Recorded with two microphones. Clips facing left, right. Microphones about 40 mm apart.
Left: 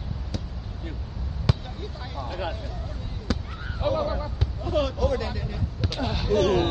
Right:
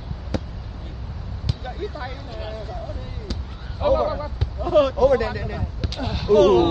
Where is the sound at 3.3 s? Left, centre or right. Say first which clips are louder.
Left 6 dB; centre.